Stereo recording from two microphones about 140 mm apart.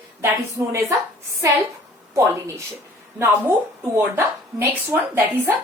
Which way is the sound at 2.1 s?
20° right (ahead or behind).